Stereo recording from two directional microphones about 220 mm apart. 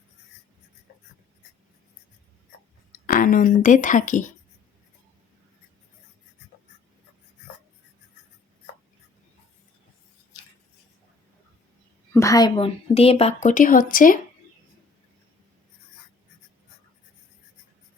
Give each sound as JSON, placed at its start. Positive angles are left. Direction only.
{"t": 3.1, "sound": "speech", "side_deg": 40}
{"t": 12.1, "sound": "a woman's voice", "side_deg": 15}